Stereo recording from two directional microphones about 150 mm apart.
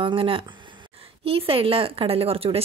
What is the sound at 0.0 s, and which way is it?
Speech, 35° right (ahead or behind).